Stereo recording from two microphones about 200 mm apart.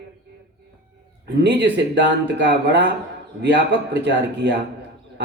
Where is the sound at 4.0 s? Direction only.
60° right (ahead or behind).